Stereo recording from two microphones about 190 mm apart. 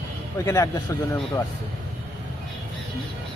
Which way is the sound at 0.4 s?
15° left (ahead or behind).